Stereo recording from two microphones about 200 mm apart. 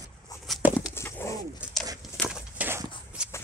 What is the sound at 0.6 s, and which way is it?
Bird, 10° right (ahead or behind).